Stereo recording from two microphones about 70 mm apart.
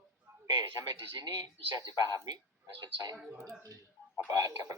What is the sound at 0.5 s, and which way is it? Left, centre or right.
Speech, right.